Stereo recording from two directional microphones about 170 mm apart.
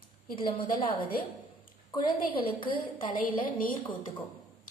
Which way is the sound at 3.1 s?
55° left (ahead or behind).